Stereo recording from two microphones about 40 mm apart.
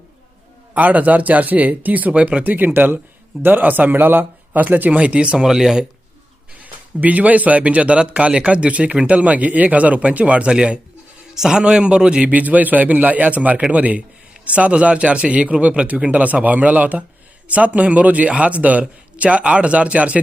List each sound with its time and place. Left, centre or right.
0.7 s speech: right
2.4 s a man's voice: right
5.5 s speech: centre
6.5 s a man's voice: right
12.3 s a man's voice: right